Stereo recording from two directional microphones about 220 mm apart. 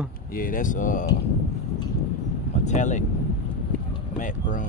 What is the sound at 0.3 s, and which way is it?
Speech, 40° left (ahead or behind).